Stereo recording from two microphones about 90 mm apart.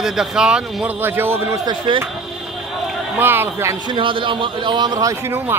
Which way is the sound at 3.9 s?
70° right (ahead or behind).